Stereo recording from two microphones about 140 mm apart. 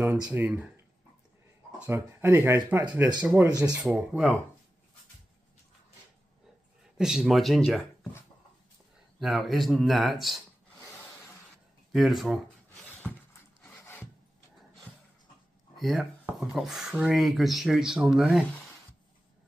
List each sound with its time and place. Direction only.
0.3 s speech: 10° right (ahead or behind)
1.8 s speech: 15° right (ahead or behind)
7.0 s speech: 5° right (ahead or behind)
9.2 s speech: centre (ahead or behind)
11.9 s speech: centre (ahead or behind)
13.7 s rub: 15° left (ahead or behind)
15.8 s speech: centre (ahead or behind)